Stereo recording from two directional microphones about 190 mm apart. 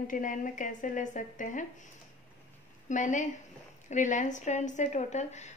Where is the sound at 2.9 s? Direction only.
40° left (ahead or behind).